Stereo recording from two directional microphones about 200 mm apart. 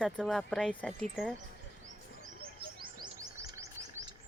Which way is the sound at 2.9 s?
20° right (ahead or behind).